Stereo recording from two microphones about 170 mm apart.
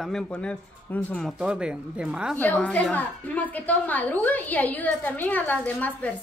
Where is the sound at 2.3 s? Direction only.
10° left (ahead or behind).